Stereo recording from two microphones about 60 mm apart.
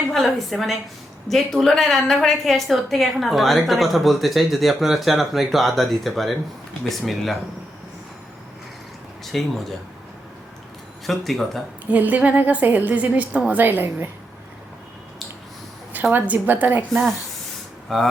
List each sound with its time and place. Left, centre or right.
0.1 s a woman's voice: centre
9.2 s a woman's voice: centre
11.0 s a woman's voice: centre
11.9 s a woman's voice: right
16.1 s a woman's voice: right
16.9 s a woman's voice: centre